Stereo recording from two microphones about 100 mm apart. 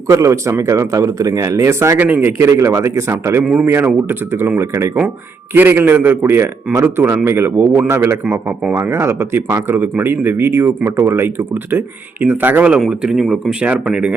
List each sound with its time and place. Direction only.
0.1 s speech: 30° right (ahead or behind)
3.4 s speech: 10° right (ahead or behind)
3.7 s speech: 20° right (ahead or behind)